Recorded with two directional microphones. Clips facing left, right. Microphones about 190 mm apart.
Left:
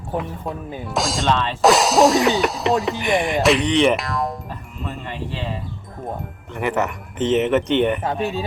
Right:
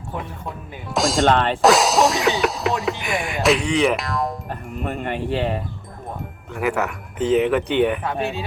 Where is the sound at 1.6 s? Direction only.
Centre (ahead or behind).